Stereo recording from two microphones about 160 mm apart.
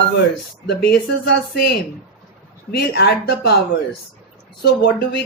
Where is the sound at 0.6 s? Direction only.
90° left.